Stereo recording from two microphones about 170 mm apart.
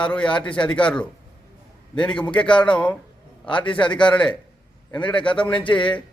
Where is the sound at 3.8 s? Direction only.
30° left (ahead or behind).